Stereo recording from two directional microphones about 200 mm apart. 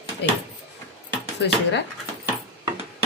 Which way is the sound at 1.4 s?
60° left (ahead or behind).